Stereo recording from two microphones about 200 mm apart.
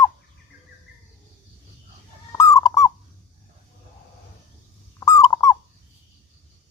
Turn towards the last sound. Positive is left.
turn(degrees=15)  # may be behind; listen again after turning